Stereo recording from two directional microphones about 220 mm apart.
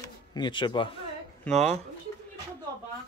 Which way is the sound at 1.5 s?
5° left (ahead or behind).